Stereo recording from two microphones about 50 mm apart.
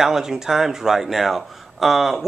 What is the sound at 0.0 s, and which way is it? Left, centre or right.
Speech, centre.